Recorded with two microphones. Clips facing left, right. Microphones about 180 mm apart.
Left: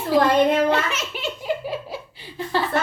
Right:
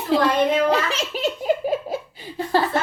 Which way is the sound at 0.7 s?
35° right (ahead or behind).